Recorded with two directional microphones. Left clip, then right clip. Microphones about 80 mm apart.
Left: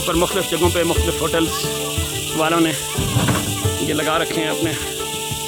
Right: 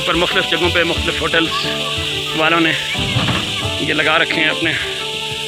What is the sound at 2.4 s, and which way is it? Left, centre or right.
Speech, centre.